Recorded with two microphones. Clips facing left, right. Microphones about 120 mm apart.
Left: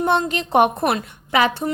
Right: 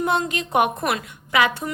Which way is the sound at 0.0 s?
35° left (ahead or behind).